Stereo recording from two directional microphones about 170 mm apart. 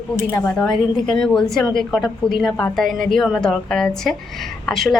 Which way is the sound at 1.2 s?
5° left (ahead or behind).